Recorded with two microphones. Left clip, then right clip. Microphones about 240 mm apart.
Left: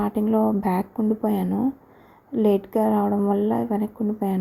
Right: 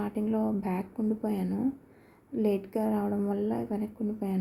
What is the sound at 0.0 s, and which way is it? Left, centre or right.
A woman's voice, left.